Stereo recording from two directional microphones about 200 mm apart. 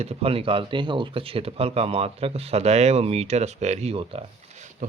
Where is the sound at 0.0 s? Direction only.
30° right (ahead or behind).